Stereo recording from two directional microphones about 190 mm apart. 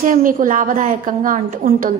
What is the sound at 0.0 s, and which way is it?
A woman's voice, 45° right (ahead or behind).